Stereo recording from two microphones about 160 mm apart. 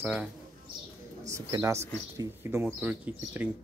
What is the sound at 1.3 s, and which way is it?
Speech, 15° right (ahead or behind).